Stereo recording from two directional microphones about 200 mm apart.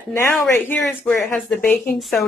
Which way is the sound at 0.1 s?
10° left (ahead or behind).